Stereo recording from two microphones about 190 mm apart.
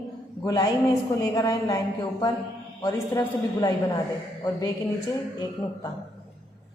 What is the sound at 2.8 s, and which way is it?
Speech, 20° left (ahead or behind).